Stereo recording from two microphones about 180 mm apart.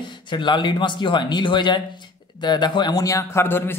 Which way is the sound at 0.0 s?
25° left (ahead or behind).